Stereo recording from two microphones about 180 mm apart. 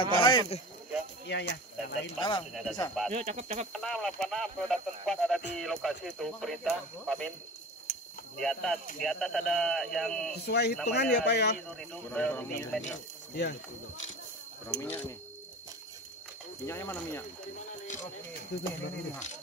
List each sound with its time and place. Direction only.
0.0 s speech: 25° left (ahead or behind)
1.2 s speech: 70° left (ahead or behind)
2.1 s speech: 25° left (ahead or behind)
2.5 s speech: 5° right (ahead or behind)
3.1 s speech: 40° right (ahead or behind)
3.7 s speech: centre (ahead or behind)
8.4 s speech: centre (ahead or behind)
10.3 s speech: 65° left (ahead or behind)
11.9 s speech: 5° left (ahead or behind)
13.3 s speech: 70° left (ahead or behind)
14.7 s speech: 10° left (ahead or behind)
16.6 s speech: 15° left (ahead or behind)
18.5 s speech: 70° left (ahead or behind)